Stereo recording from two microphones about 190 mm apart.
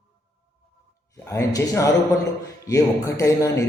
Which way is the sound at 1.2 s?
15° left (ahead or behind).